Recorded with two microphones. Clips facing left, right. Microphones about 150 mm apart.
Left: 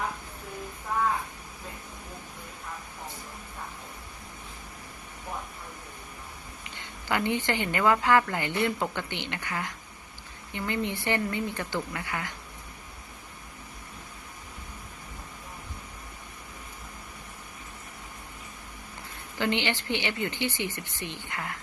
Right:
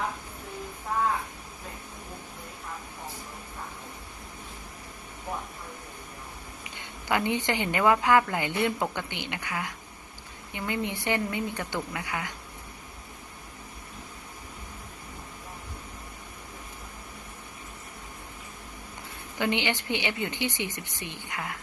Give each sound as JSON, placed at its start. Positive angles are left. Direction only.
{"t": 7.1, "sound": "a woman's voice", "side_deg": -15}
{"t": 19.4, "sound": "a woman's voice", "side_deg": -15}